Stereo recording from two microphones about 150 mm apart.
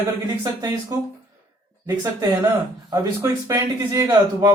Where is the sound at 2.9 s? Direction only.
20° right (ahead or behind).